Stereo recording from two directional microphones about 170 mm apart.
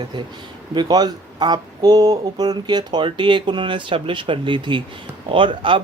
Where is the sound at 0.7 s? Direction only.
25° right (ahead or behind).